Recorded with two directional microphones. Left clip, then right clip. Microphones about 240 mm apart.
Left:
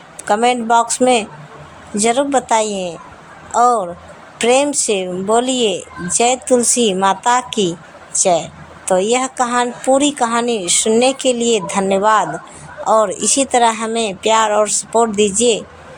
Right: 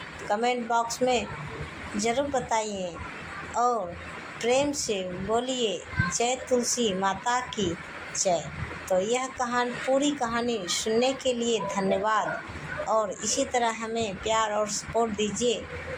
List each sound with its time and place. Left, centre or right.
0.3 s a woman's voice: left